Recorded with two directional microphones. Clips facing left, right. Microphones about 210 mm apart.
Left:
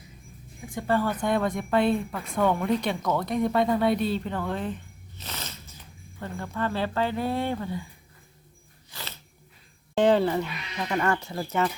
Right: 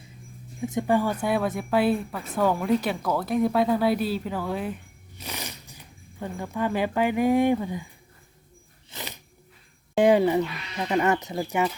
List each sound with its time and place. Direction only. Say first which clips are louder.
0.6 s speech: right 3 dB; 20° right (ahead or behind)
8.9 s a sound: right 4 dB; 15° right (ahead or behind)
9.9 s speech: right 2 dB; 10° right (ahead or behind)